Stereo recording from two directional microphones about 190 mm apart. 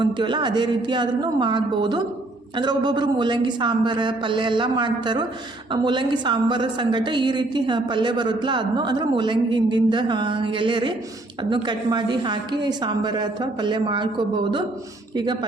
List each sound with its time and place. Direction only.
0.0 s a woman's voice: 25° right (ahead or behind)